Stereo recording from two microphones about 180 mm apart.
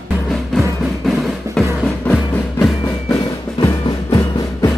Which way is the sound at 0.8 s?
Centre (ahead or behind).